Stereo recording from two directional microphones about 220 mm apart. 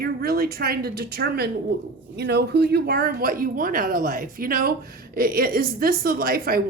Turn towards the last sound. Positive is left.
turn(degrees=-40)  # may be behind; listen again after turning